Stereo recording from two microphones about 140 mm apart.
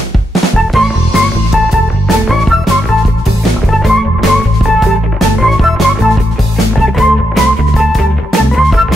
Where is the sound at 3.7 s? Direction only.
Centre (ahead or behind).